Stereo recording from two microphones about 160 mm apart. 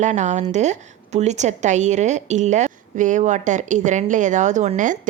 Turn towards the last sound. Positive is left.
turn(degrees=-50)  # may be behind; listen again after turning